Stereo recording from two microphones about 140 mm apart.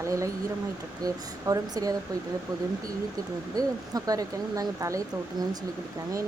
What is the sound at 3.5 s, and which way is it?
Speech, 25° right (ahead or behind).